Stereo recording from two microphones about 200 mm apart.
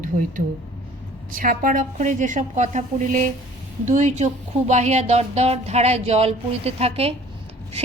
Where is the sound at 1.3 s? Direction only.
45° right (ahead or behind).